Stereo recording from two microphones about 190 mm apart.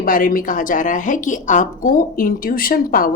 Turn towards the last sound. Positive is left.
turn(degrees=50)  # may be behind; listen again after turning